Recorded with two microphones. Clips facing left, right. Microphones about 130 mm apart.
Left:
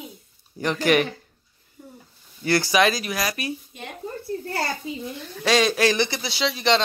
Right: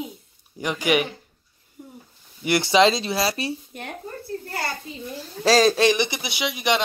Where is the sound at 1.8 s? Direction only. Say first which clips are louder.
Right 2 dB; 15° right (ahead or behind).